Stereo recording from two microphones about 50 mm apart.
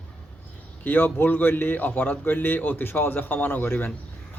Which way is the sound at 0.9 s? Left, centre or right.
Left.